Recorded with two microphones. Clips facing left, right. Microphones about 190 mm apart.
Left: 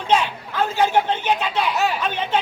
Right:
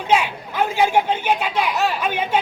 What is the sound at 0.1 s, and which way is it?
Speech, 10° right (ahead or behind).